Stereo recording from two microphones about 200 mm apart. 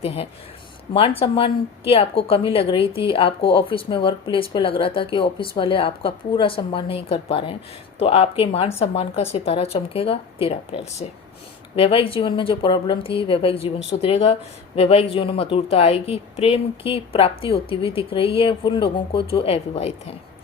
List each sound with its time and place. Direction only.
0.0 s a woman's voice: 30° left (ahead or behind)